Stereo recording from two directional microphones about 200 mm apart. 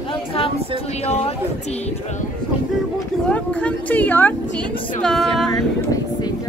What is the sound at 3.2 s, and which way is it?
Speech, 5° left (ahead or behind).